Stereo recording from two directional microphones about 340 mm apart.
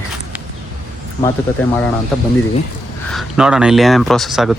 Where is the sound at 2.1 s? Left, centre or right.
Centre.